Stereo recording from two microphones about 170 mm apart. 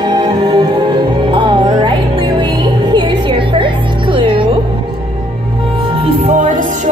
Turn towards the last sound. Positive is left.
turn(degrees=-50)  # may be behind; listen again after turning